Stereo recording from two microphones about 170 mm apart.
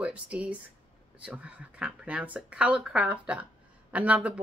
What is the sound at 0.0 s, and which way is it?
Speech, 10° right (ahead or behind).